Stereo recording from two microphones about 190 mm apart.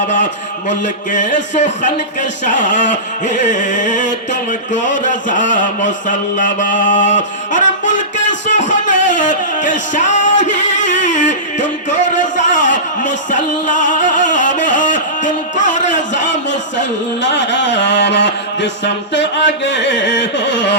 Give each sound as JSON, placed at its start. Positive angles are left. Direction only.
{"t": 0.7, "sound": "music", "side_deg": 40}
{"t": 5.0, "sound": "mantra", "side_deg": 40}
{"t": 12.4, "sound": "music", "side_deg": 40}
{"t": 16.3, "sound": "a sound", "side_deg": 70}
{"t": 19.1, "sound": "speech", "side_deg": 70}